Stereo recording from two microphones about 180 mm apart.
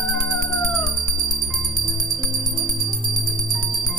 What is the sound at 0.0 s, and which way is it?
Cat, centre (ahead or behind).